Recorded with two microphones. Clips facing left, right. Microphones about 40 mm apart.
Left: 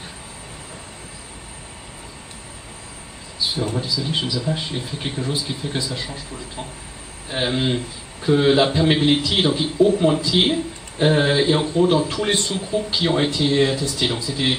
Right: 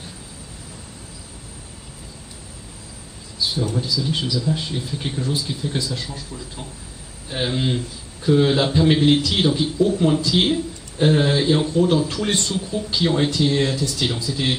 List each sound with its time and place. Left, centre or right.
3.7 s speech: centre
7.2 s speech: centre